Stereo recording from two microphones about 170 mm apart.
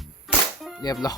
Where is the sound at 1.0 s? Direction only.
20° left (ahead or behind).